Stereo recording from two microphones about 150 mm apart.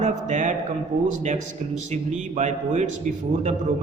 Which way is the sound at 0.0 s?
55° right (ahead or behind).